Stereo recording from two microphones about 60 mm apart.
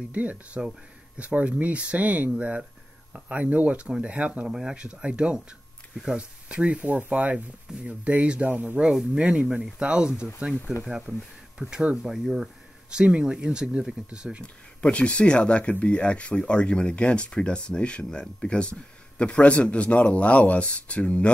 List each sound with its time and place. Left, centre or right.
0.1 s speech: right
8.8 s speech: centre
14.4 s speech: left